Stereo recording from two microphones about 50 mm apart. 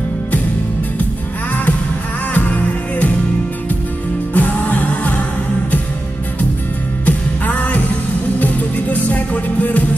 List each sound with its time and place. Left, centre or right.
2.3 s music: left
4.3 s music: left
7.1 s music: left